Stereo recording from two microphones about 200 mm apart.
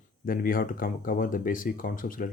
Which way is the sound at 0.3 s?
45° left (ahead or behind).